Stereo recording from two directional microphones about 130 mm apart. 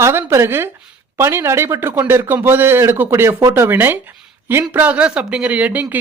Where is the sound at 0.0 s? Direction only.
20° right (ahead or behind).